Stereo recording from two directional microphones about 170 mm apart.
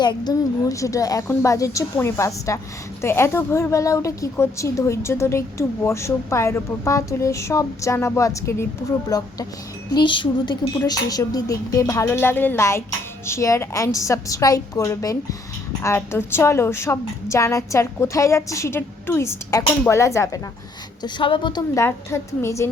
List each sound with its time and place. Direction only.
0.0 s a woman's voice: 25° left (ahead or behind)
21.0 s speech: 30° left (ahead or behind)
21.8 s a woman's voice: 15° left (ahead or behind)